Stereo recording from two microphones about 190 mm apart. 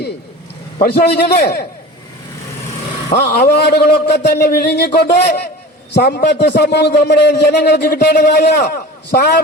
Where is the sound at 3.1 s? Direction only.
60° left (ahead or behind).